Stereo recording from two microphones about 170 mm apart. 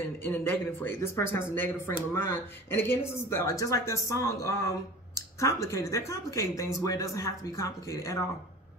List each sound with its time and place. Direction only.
0.2 s speech: 10° left (ahead or behind)